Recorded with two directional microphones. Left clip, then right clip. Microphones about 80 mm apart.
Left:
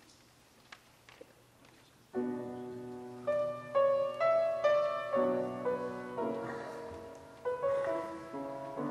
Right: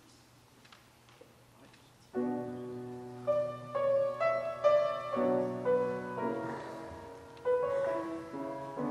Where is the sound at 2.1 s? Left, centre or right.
Centre.